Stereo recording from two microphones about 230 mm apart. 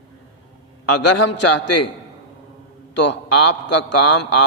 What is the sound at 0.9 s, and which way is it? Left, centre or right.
A man's voice, left.